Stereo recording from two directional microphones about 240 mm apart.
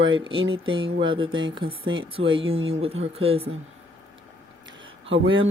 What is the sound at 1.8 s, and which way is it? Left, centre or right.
Speech, right.